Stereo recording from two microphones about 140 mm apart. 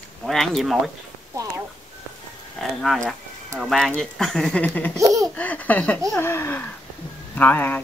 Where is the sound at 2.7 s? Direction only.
5° left (ahead or behind).